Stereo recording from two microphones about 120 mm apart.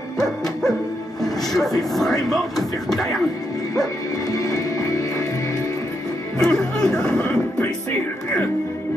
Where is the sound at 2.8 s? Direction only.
Centre (ahead or behind).